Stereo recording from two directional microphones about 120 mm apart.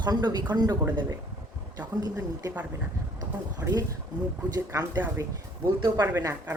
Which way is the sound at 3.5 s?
30° right (ahead or behind).